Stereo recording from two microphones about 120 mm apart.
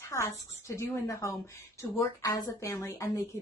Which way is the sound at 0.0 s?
25° left (ahead or behind).